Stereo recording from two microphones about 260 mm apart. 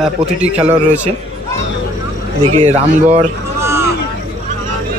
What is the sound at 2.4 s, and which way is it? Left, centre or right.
Speech, right.